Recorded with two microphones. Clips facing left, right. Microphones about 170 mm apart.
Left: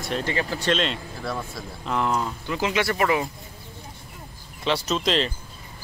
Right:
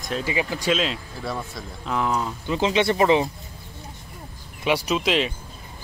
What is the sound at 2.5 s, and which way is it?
Speech, 25° right (ahead or behind).